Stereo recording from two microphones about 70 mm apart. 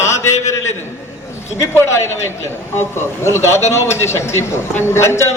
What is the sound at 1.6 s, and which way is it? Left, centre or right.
A man's voice, left.